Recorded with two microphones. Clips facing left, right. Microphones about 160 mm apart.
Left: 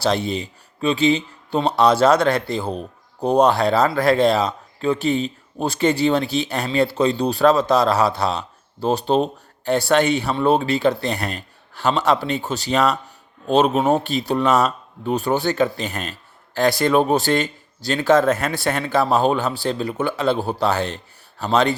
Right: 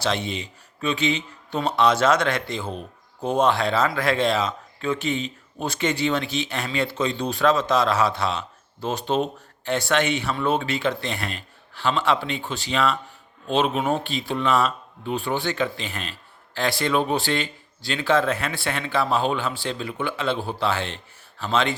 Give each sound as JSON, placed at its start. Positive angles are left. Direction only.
{"t": 0.0, "sound": "speech", "side_deg": 35}